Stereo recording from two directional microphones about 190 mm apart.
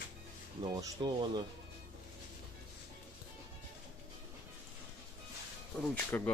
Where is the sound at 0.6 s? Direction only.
20° right (ahead or behind).